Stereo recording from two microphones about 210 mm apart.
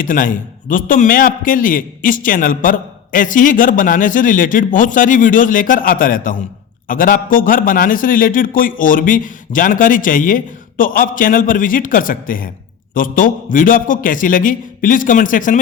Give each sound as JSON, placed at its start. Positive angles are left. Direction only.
{"t": 0.0, "sound": "a man's voice", "side_deg": 40}